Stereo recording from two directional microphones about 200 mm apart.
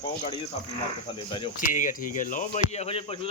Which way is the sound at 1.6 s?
40° left (ahead or behind).